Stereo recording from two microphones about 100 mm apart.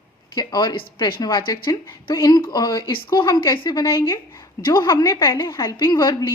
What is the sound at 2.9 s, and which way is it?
Speech, 50° left (ahead or behind).